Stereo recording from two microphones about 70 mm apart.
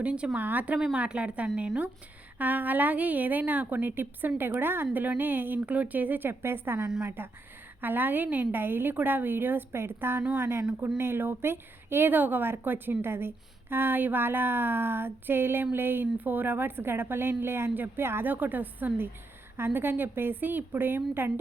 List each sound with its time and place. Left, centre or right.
0.0 s a woman's voice: centre